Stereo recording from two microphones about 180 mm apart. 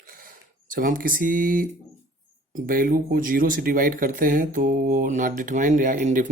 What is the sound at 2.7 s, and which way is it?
Speech, 50° right (ahead or behind).